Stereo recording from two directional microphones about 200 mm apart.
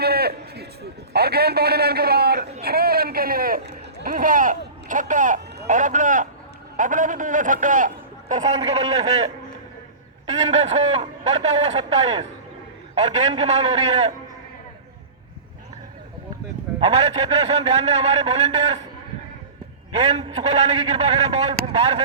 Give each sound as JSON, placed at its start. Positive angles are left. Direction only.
{"t": 0.0, "sound": "a sound", "side_deg": -50}
{"t": 5.6, "sound": "a man's voice", "side_deg": -40}
{"t": 10.2, "sound": "a man's voice", "side_deg": -35}
{"t": 16.8, "sound": "a man's voice", "side_deg": -35}
{"t": 19.9, "sound": "a man's voice", "side_deg": -35}